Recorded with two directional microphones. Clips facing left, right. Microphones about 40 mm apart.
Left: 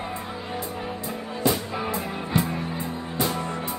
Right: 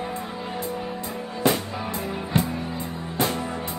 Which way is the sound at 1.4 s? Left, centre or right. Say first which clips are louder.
Right 2 dB; right.